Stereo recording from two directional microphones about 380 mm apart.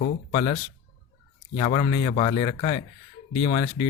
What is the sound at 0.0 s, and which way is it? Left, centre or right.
Speech, centre.